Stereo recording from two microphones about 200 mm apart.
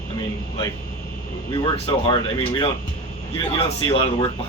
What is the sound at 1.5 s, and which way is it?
A man's voice, 25° left (ahead or behind).